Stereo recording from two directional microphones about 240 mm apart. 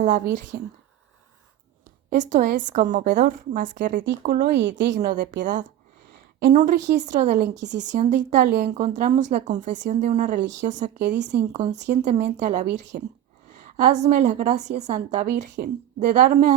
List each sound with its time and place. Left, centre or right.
0.5 s speech: right
2.0 s speech: right
4.9 s a woman's voice: right
7.5 s speech: right
7.9 s a woman's voice: right